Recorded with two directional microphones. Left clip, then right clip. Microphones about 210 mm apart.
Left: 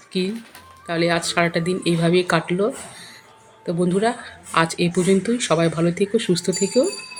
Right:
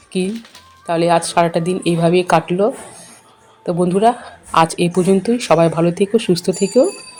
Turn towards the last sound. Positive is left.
turn(degrees=-10)  # may be behind; listen again after turning